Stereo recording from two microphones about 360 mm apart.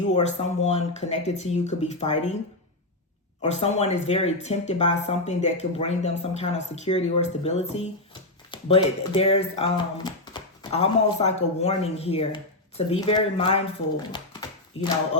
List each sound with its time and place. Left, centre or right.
0.1 s speech: centre
3.4 s speech: centre